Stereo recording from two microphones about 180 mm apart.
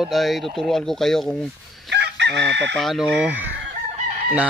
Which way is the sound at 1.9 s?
70° right (ahead or behind).